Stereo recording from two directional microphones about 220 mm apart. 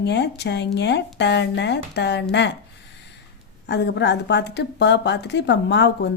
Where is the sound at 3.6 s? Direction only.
50° left (ahead or behind).